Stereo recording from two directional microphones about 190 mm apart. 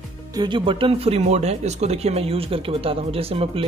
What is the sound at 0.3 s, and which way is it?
Speech, 25° right (ahead or behind).